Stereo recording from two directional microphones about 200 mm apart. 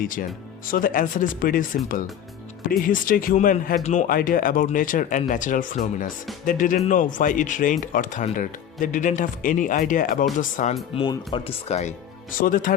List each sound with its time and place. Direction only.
0.0 s speech: 45° left (ahead or behind)
10.9 s speech: 20° left (ahead or behind); by 12.7 s 45° left (ahead or behind)